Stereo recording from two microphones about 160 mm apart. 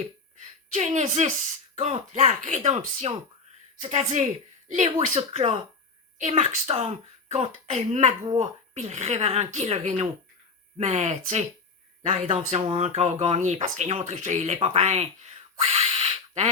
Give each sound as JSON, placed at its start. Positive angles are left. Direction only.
{"t": 0.7, "sound": "speech", "side_deg": -45}